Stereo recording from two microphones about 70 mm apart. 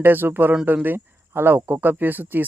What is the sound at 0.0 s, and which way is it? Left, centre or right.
Speech, right.